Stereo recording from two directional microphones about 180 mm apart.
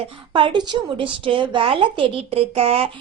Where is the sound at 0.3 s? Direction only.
25° right (ahead or behind).